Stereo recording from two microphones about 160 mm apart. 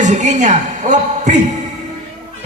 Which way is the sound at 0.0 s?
50° right (ahead or behind).